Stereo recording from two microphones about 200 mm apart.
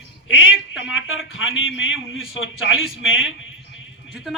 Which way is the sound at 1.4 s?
75° left (ahead or behind).